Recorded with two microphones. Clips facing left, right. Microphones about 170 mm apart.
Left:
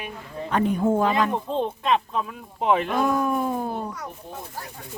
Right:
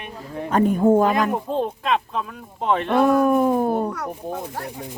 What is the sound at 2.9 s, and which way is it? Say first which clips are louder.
Speech: right 6 dB; 60° right (ahead or behind).